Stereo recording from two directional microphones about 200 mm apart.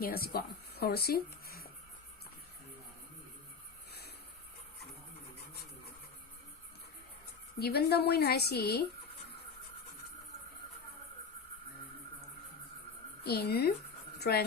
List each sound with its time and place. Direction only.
0.0 s speech: 50° left (ahead or behind)
7.6 s speech: 55° left (ahead or behind)
13.2 s a woman's voice: 50° left (ahead or behind)